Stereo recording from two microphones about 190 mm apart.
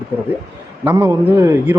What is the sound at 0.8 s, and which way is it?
Speech, 15° right (ahead or behind).